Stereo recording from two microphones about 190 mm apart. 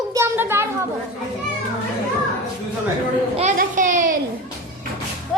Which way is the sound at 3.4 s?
40° right (ahead or behind).